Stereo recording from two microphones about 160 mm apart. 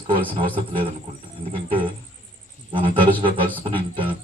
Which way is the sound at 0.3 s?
35° right (ahead or behind).